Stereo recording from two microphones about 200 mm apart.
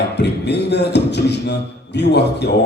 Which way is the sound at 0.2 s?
55° left (ahead or behind).